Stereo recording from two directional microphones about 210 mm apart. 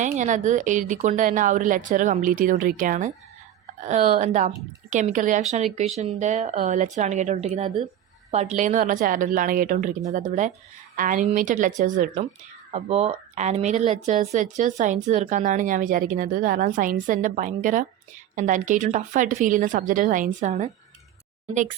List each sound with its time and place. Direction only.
0.2 s speech: 35° right (ahead or behind)